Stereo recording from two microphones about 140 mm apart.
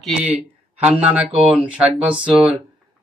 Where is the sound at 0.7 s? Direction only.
50° right (ahead or behind).